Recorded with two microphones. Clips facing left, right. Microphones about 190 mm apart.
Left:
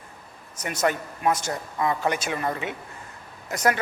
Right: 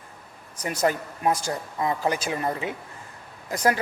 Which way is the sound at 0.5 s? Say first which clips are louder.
Right 1 dB; 30° right (ahead or behind).